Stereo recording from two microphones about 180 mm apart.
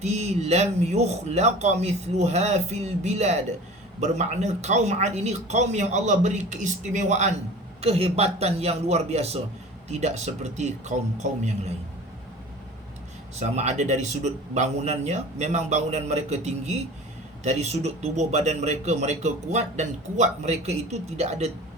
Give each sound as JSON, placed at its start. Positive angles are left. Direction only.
{"t": 0.0, "sound": "speech", "side_deg": -40}
{"t": 13.3, "sound": "speech", "side_deg": -40}